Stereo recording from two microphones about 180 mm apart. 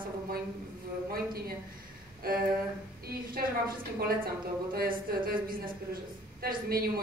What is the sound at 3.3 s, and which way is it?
A woman's voice, 55° right (ahead or behind).